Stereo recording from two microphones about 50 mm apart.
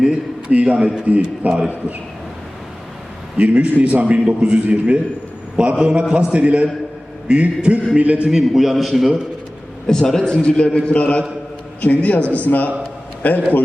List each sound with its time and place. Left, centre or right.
0.0 s a sound: centre
0.6 s a man's voice: centre
3.3 s a man's voice: right
8.3 s a man's voice: centre
9.8 s a man's voice: centre
10.9 s a man's voice: left